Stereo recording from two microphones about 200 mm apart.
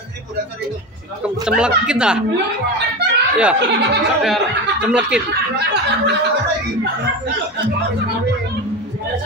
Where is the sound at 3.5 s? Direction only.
60° right (ahead or behind).